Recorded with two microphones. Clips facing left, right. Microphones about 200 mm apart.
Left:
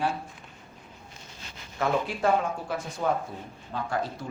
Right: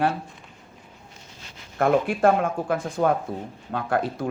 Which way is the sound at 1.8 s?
55° right (ahead or behind).